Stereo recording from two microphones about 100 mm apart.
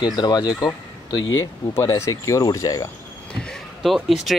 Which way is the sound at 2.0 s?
30° left (ahead or behind).